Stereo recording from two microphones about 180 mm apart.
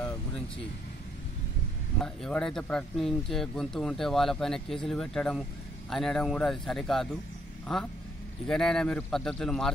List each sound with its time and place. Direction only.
2.0 s speech: 5° left (ahead or behind)